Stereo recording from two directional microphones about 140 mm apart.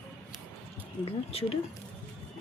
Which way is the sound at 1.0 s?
45° left (ahead or behind).